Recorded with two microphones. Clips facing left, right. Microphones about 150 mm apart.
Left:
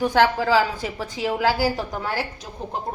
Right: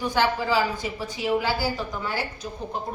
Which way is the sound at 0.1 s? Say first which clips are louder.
Left 2 dB; 90° left.